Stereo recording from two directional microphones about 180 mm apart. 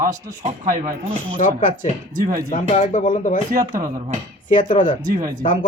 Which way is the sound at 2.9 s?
45° left (ahead or behind).